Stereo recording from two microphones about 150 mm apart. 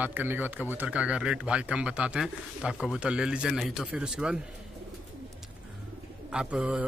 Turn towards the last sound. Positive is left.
turn(degrees=-10)  # may be behind; listen again after turning